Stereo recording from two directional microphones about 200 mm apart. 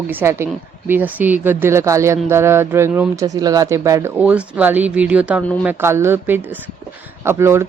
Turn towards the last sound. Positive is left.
turn(degrees=-15)  # may be behind; listen again after turning